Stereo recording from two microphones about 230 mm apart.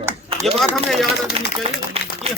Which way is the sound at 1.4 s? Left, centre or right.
Right.